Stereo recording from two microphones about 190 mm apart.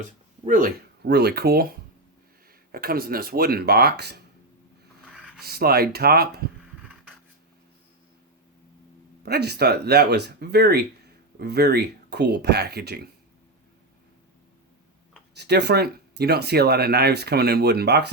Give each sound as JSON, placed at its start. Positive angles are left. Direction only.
{"t": 0.0, "sound": "speech", "side_deg": -40}
{"t": 2.7, "sound": "speech", "side_deg": -50}
{"t": 5.4, "sound": "speech", "side_deg": -55}
{"t": 9.2, "sound": "speech", "side_deg": -55}
{"t": 15.4, "sound": "speech", "side_deg": -60}